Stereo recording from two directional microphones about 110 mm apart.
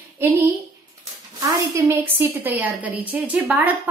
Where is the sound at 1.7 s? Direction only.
25° right (ahead or behind).